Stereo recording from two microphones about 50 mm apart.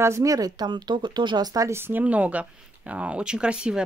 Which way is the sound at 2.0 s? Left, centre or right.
Right.